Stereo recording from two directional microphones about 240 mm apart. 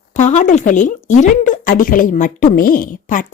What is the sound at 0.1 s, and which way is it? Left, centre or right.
A woman's voice, left.